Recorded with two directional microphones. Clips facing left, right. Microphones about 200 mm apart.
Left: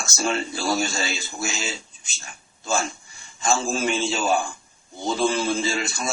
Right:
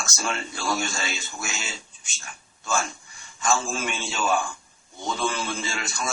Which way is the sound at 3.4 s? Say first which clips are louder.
Left 3 dB; 25° left (ahead or behind).